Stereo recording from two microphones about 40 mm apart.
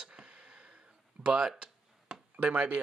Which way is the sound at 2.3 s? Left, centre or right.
Right.